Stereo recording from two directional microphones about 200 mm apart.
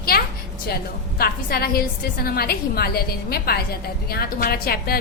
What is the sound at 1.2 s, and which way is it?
A woman's voice, 50° left (ahead or behind).